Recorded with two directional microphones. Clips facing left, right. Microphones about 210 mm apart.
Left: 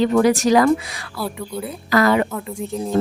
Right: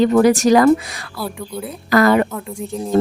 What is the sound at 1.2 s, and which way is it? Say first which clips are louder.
Speech: even; centre (ahead or behind).